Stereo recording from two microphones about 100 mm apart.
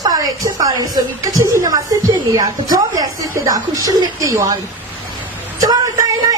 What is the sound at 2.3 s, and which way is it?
A woman's voice, 40° right (ahead or behind).